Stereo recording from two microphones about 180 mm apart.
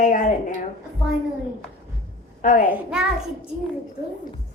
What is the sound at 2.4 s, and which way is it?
Speech, 45° left (ahead or behind).